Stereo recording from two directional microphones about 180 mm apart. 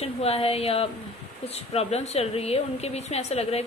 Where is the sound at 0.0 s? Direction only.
35° left (ahead or behind).